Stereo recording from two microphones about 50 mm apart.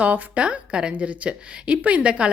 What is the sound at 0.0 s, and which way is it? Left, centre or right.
A woman's voice, right.